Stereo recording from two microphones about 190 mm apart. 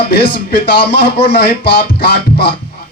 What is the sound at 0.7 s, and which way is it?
Speech, 60° left (ahead or behind).